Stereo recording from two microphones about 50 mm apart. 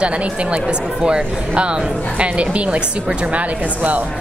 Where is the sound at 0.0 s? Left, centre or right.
Right.